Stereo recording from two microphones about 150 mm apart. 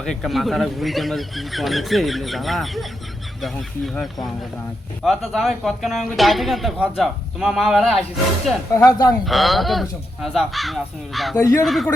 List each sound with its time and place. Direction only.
0.0 s speech: centre (ahead or behind)
8.7 s speech: 20° left (ahead or behind)
9.2 s speech: centre (ahead or behind)
11.3 s speech: 20° left (ahead or behind)
11.6 s speech: centre (ahead or behind)